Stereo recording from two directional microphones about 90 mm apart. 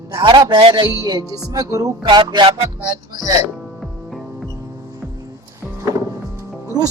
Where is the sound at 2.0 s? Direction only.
55° right (ahead or behind).